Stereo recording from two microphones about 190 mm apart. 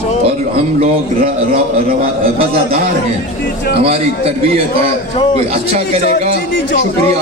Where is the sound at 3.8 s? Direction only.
30° right (ahead or behind).